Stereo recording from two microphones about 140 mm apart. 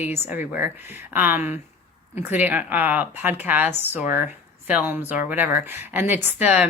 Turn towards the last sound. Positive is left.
turn(degrees=-10)  # may be behind; listen again after turning